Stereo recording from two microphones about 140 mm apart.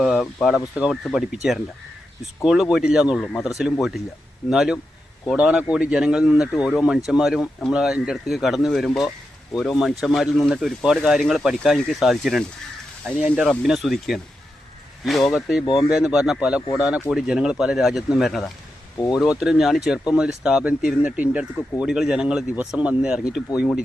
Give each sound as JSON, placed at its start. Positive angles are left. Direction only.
{"t": 0.0, "sound": "speech", "side_deg": 0}
{"t": 13.1, "sound": "speech", "side_deg": -10}
{"t": 15.3, "sound": "speech", "side_deg": 0}
{"t": 15.6, "sound": "speech", "side_deg": 35}
{"t": 15.9, "sound": "speech", "side_deg": -5}